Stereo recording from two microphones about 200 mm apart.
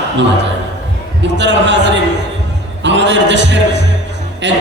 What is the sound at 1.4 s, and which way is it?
Speech, 60° right (ahead or behind).